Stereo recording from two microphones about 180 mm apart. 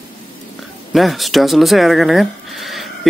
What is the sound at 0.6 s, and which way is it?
Speech, centre (ahead or behind).